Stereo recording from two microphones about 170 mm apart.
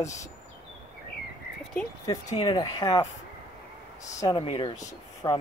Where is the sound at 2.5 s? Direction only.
30° left (ahead or behind).